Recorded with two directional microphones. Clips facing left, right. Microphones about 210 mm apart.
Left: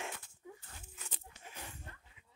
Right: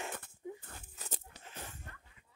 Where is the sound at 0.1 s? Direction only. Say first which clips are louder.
Right 6 dB; 55° right (ahead or behind).